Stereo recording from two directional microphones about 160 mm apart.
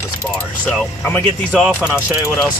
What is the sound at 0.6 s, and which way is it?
Speech, 10° left (ahead or behind).